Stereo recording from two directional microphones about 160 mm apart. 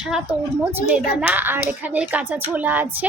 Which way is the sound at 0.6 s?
10° right (ahead or behind).